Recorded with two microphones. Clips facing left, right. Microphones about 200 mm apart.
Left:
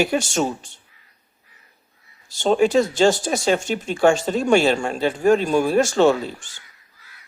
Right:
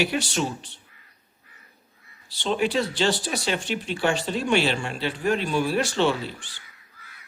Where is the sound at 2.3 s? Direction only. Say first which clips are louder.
Left 7 dB; 45° left (ahead or behind).